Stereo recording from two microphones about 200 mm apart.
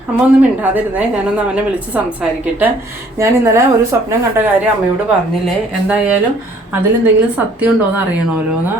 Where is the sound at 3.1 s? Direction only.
15° right (ahead or behind).